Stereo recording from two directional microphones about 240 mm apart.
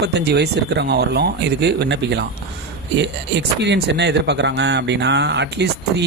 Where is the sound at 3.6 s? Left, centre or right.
Right.